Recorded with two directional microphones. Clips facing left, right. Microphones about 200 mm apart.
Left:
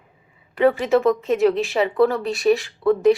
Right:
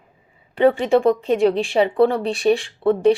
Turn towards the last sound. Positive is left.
turn(degrees=-30)  # may be behind; listen again after turning